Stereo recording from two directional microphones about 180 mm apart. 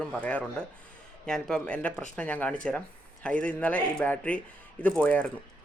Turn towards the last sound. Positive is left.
turn(degrees=5)  # may be behind; listen again after turning